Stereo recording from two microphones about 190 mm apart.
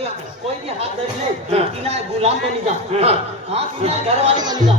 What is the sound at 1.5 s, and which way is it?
A man's voice, 35° right (ahead or behind).